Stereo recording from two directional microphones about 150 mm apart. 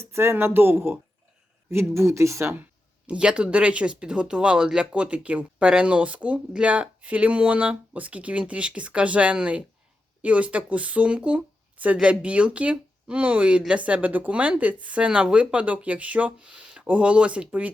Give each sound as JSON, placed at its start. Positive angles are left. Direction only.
{"t": 0.0, "sound": "speech", "side_deg": -15}